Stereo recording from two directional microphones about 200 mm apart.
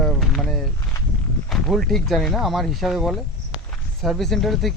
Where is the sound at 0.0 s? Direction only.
Centre (ahead or behind).